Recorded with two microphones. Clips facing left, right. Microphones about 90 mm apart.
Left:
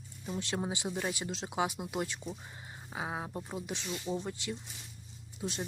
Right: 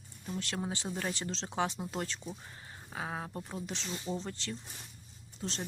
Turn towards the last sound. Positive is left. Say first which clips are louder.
# left 2 dB
turn(degrees=15)  # may be behind; listen again after turning